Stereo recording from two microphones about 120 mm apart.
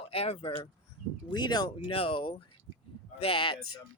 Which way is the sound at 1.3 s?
35° left (ahead or behind).